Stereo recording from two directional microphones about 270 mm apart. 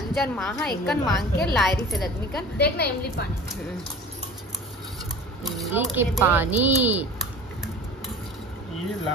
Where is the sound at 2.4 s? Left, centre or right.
Left.